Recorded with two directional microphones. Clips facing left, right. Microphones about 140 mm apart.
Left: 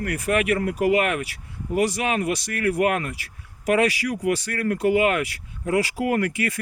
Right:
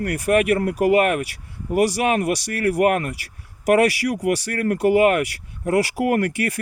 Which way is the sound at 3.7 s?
60° right (ahead or behind).